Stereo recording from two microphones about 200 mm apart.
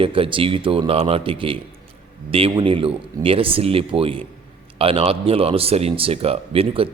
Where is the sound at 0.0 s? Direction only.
25° right (ahead or behind).